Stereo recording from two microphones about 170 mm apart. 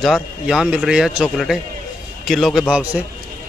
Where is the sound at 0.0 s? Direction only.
Centre (ahead or behind).